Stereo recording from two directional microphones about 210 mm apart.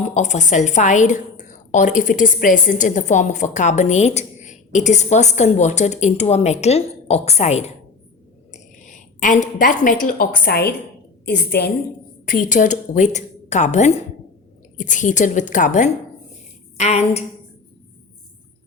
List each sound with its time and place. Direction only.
0.0 s a woman's voice: 35° left (ahead or behind)